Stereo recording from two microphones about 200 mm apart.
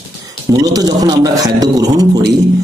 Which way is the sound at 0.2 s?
20° right (ahead or behind).